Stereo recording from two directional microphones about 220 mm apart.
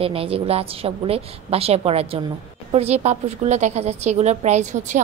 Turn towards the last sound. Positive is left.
turn(degrees=-35)  # may be behind; listen again after turning